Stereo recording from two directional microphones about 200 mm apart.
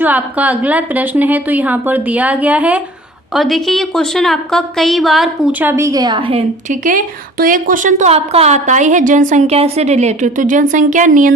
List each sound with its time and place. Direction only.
0.0 s a woman's voice: 10° right (ahead or behind); by 6.4 s 25° right (ahead or behind)
6.7 s speech: 40° right (ahead or behind)